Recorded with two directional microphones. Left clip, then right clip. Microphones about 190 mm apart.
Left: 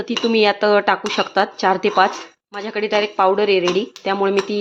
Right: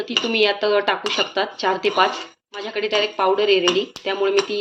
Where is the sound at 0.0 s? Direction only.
55° left (ahead or behind).